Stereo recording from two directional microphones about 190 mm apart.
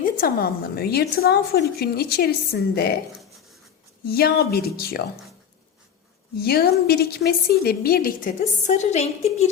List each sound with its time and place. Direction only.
0.0 s a woman's voice: 50° left (ahead or behind)
4.0 s a woman's voice: 55° left (ahead or behind)
6.3 s a woman's voice: 55° left (ahead or behind); by 9.5 s 35° left (ahead or behind)